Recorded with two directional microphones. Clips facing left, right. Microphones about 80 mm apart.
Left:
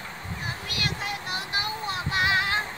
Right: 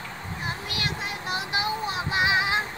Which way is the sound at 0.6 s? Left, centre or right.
Right.